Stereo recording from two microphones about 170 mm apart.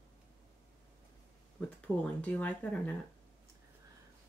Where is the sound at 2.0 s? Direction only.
10° left (ahead or behind).